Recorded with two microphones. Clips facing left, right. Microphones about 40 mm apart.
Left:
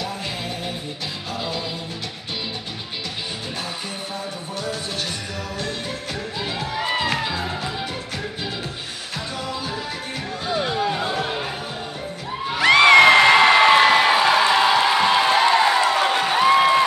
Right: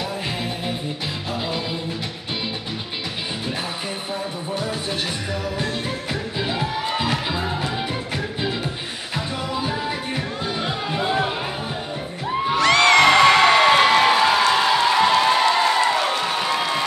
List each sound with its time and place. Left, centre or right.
6.4 s music: centre
9.1 s music: centre
12.5 s a sound: centre
14.5 s music: centre